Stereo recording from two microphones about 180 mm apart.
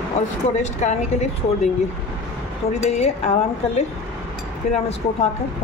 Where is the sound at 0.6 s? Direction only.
40° left (ahead or behind).